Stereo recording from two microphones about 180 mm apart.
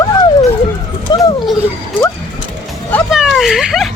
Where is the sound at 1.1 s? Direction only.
25° left (ahead or behind).